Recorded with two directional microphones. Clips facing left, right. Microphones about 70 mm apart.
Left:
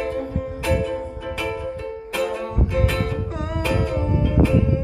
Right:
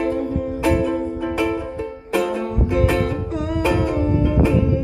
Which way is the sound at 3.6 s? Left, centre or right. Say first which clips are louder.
Right 4 dB; centre.